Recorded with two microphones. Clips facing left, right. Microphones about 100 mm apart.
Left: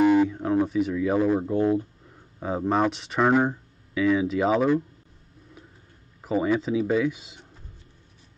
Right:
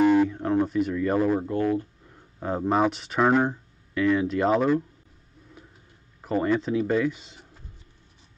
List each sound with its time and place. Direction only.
0.0 s a sound: 5° left (ahead or behind)
1.5 s speech: 20° left (ahead or behind)
2.4 s speech: centre (ahead or behind)
6.2 s speech: 5° left (ahead or behind)